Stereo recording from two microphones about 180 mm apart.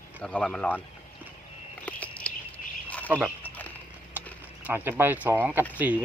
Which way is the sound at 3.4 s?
10° left (ahead or behind).